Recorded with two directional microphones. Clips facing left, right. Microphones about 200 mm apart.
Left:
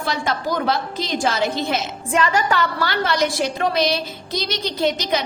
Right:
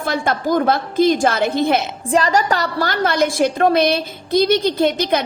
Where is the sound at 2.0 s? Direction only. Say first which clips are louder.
Right 3 dB; 35° right (ahead or behind).